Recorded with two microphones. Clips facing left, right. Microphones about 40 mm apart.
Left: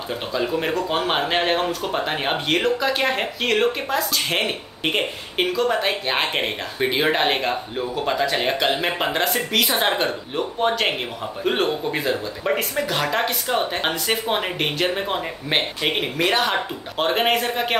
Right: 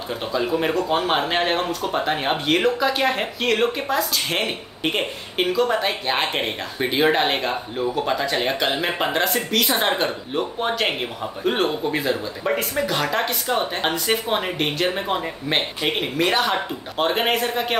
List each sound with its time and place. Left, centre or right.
0.1 s speech: centre